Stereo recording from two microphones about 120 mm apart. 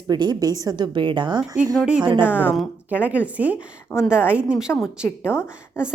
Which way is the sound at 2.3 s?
10° right (ahead or behind).